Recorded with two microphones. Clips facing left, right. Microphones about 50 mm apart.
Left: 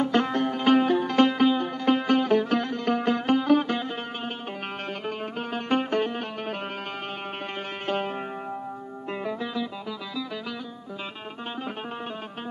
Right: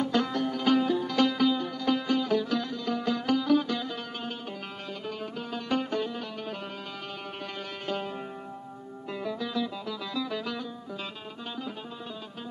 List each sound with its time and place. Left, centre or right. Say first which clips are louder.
0.0 s music: left 4 dB; left
5.0 s music: left 2 dB; left
7.8 s music: left 5 dB; left
9.2 s music: left 1 dB; left